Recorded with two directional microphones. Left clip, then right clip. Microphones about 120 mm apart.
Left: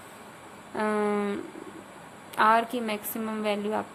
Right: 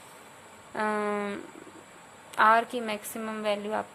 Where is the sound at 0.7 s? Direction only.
35° right (ahead or behind).